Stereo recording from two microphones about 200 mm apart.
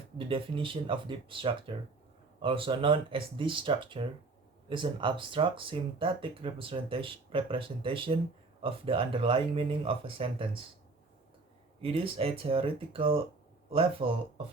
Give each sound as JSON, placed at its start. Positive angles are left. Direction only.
{"t": 0.2, "sound": "speech", "side_deg": -25}
{"t": 11.8, "sound": "speech", "side_deg": -30}